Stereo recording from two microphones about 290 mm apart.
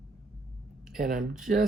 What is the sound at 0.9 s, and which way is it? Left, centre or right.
Speech, right.